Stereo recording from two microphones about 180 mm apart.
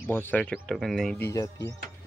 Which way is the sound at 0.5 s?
Centre (ahead or behind).